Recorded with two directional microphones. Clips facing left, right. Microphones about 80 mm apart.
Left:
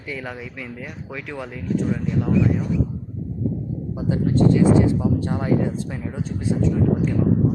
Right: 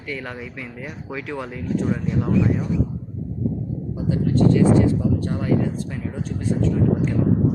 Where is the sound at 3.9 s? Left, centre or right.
Left.